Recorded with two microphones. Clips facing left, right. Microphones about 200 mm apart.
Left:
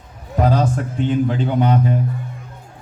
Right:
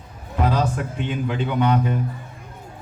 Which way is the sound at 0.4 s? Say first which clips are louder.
Left 4 dB; 35° left (ahead or behind).